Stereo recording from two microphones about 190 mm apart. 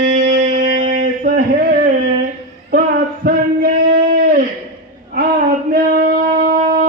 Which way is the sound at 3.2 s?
50° right (ahead or behind).